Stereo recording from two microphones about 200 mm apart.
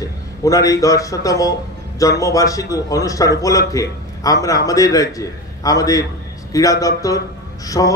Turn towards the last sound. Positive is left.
turn(degrees=15)  # may be behind; listen again after turning